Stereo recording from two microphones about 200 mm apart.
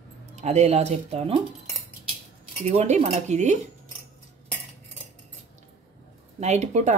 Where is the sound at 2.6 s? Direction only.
35° right (ahead or behind).